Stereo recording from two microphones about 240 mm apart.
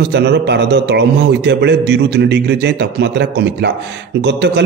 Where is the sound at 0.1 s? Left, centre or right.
Right.